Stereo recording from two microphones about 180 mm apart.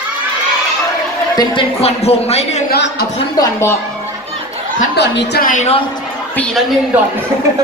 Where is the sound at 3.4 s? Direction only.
15° left (ahead or behind).